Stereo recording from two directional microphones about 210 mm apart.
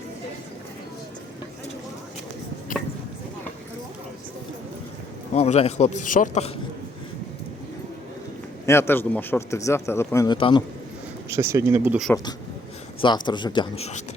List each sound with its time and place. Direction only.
5.3 s a man's voice: 30° left (ahead or behind)
8.6 s a man's voice: 10° left (ahead or behind)
11.3 s speech: 10° right (ahead or behind)
13.0 s speech: 20° left (ahead or behind)